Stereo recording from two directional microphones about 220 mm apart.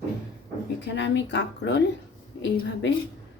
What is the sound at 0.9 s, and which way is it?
Speech, 55° left (ahead or behind).